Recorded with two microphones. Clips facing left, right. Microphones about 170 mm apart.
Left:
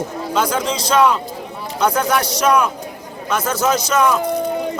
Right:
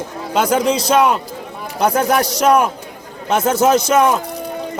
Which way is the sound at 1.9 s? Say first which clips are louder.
Right 3 dB; 50° right (ahead or behind).